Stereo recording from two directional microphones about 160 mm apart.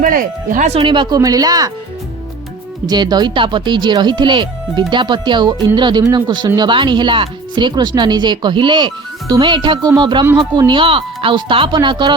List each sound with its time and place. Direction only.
0.0 s speech: 55° right (ahead or behind); by 1.7 s 25° right (ahead or behind)
2.8 s speech: 25° right (ahead or behind)